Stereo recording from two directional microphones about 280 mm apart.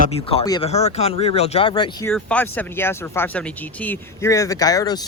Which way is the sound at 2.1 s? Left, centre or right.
Centre.